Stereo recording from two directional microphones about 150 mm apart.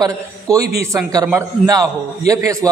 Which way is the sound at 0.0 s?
20° right (ahead or behind).